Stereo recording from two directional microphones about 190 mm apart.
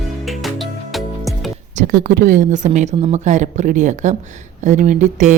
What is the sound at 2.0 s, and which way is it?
A woman's voice, 45° right (ahead or behind).